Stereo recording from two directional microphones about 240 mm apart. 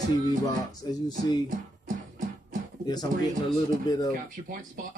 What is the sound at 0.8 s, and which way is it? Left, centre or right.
Speech, centre.